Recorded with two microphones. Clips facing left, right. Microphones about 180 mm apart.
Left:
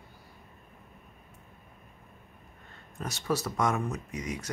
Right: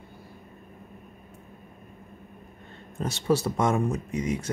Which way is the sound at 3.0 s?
25° right (ahead or behind).